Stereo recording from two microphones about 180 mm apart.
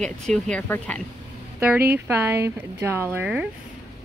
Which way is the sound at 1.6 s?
10° right (ahead or behind).